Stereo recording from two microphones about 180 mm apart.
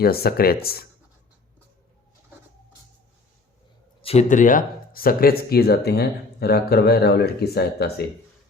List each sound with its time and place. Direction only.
0.0 s speech: 60° left (ahead or behind)
4.0 s speech: 35° left (ahead or behind); by 8.0 s 65° left (ahead or behind)